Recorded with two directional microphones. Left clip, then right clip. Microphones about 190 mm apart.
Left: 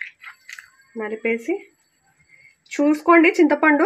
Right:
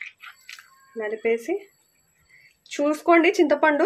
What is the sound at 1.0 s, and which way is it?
Speech, 20° left (ahead or behind).